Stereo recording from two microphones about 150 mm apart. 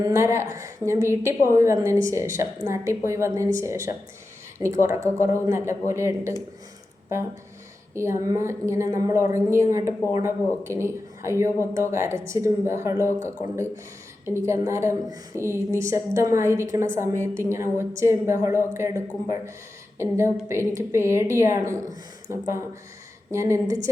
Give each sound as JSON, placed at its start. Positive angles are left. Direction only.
{"t": 0.0, "sound": "a woman's voice", "side_deg": -20}
{"t": 7.9, "sound": "a woman's voice", "side_deg": -20}
{"t": 20.0, "sound": "a woman's voice", "side_deg": -20}